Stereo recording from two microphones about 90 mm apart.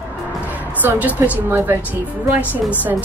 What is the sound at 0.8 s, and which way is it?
Speech, 20° right (ahead or behind).